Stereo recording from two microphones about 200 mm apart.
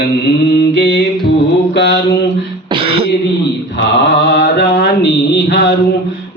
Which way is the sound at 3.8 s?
60° left (ahead or behind).